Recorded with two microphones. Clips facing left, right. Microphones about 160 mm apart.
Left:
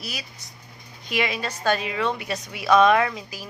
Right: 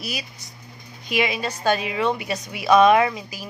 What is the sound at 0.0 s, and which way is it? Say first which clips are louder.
A woman's voice: right 4 dB; 5° right (ahead or behind).